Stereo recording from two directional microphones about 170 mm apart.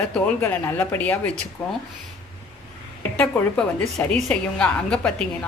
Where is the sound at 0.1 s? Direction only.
10° left (ahead or behind).